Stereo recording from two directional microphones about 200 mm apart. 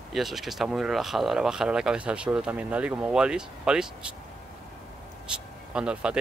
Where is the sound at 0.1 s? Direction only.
Centre (ahead or behind).